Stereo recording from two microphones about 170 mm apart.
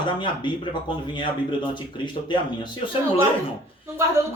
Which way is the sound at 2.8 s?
35° left (ahead or behind).